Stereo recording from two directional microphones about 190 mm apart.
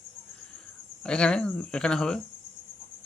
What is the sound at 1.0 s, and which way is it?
Speech, 5° left (ahead or behind).